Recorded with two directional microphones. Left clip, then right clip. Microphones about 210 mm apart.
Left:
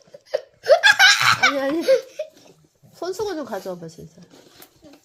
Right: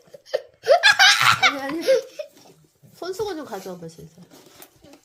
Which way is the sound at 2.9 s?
35° left (ahead or behind).